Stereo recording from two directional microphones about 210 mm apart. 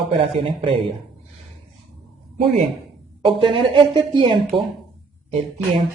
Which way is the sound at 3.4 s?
25° right (ahead or behind).